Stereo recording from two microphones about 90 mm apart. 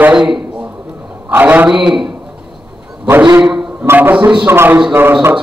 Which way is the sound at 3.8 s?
25° right (ahead or behind).